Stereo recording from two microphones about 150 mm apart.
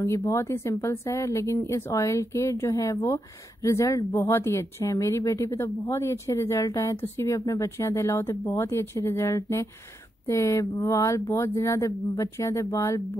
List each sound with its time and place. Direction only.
0.0 s speech: 20° left (ahead or behind)